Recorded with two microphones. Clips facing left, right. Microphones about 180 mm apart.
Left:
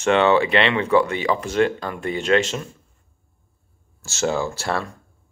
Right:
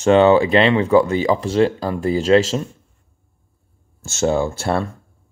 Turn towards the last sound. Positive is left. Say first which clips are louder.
# right 4 dB
turn(degrees=-25)  # may be behind; listen again after turning